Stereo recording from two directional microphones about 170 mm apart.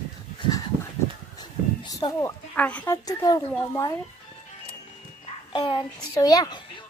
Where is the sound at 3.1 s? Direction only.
20° left (ahead or behind).